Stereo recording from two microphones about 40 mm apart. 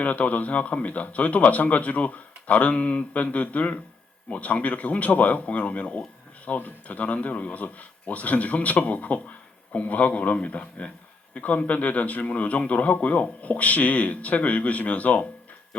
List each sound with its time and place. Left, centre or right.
0.0 s a man's voice: left